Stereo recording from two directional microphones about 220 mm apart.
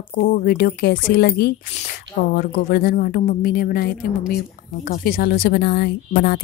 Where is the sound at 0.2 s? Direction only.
45° left (ahead or behind).